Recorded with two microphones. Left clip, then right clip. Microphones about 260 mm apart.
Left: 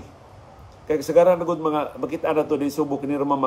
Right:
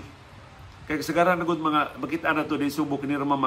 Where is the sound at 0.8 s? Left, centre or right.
Right.